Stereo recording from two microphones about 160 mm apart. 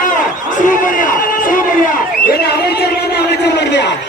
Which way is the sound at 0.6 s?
55° left (ahead or behind).